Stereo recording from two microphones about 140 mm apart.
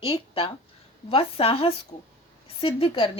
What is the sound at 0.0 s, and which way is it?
A woman's voice, 40° left (ahead or behind).